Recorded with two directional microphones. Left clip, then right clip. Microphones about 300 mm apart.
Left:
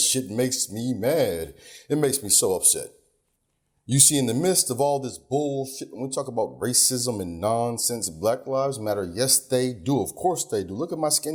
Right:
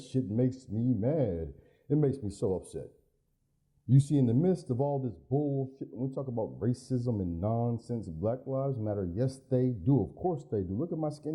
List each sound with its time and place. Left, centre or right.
0.0 s speech: centre
5.3 s speech: left
5.6 s speech: centre
6.2 s speech: centre
6.6 s speech: centre
10.8 s speech: centre
11.0 s speech: centre